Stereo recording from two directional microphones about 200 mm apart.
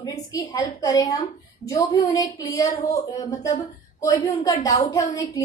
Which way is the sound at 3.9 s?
15° left (ahead or behind).